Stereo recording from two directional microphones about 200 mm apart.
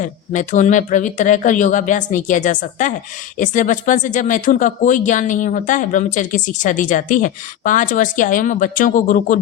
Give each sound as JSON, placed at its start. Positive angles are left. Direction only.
{"t": 0.0, "sound": "speech", "side_deg": 40}